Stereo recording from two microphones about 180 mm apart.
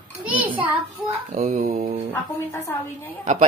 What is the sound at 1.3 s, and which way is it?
Mantra, 40° right (ahead or behind).